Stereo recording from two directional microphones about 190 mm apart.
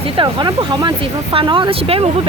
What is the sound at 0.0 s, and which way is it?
Speech, 25° right (ahead or behind).